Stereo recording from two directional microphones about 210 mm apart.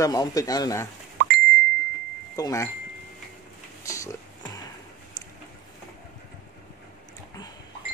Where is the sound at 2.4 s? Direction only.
15° left (ahead or behind).